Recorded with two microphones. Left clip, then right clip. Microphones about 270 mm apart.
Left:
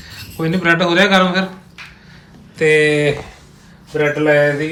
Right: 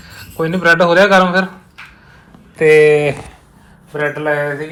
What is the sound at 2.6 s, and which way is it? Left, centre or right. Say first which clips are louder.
Speech: right 4 dB; centre.